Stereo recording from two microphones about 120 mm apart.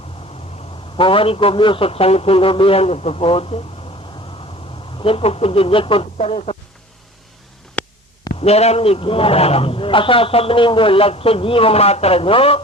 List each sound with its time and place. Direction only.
0.9 s a man's voice: 50° left (ahead or behind)
5.0 s a man's voice: 55° left (ahead or behind)
8.4 s a man's voice: 60° left (ahead or behind)